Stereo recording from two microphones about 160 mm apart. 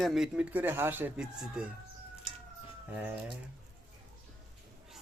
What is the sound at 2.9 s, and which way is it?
Speech, 10° right (ahead or behind).